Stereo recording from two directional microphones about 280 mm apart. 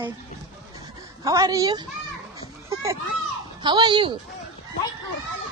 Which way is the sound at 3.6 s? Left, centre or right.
Centre.